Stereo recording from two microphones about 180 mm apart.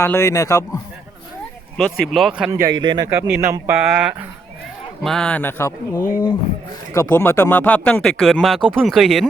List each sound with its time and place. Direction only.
0.0 s speech: 15° left (ahead or behind)
1.8 s speech: centre (ahead or behind)
2.5 s speech: 20° right (ahead or behind)
3.1 s a man's voice: 10° right (ahead or behind)
5.0 s speech: 5° left (ahead or behind)